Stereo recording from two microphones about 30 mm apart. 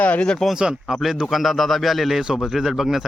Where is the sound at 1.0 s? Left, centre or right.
Centre.